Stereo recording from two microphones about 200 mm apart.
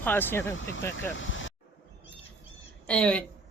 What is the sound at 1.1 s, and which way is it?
Vehicle, 70° left (ahead or behind).